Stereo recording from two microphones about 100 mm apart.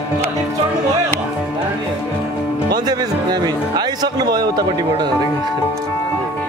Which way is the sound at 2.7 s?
45° right (ahead or behind).